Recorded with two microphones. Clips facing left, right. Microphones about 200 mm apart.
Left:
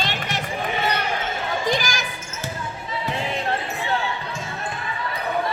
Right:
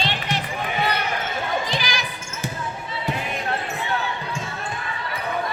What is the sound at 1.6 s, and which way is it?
Basketball bounce, 45° left (ahead or behind).